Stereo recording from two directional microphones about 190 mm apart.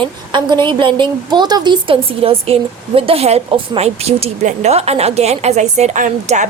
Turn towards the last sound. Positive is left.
turn(degrees=-40)  # may be behind; listen again after turning